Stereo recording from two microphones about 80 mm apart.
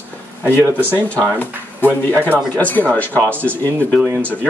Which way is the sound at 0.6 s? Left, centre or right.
Right.